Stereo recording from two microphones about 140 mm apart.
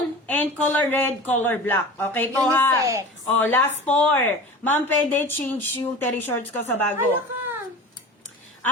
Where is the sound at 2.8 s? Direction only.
20° right (ahead or behind).